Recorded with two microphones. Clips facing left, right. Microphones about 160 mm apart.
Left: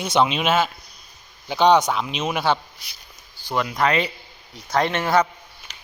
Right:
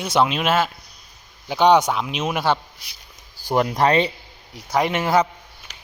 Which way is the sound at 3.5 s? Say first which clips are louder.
Right 4 dB; 40° right (ahead or behind).